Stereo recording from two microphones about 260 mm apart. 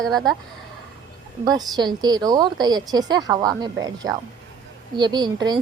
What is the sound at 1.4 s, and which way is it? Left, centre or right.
A woman's voice, centre.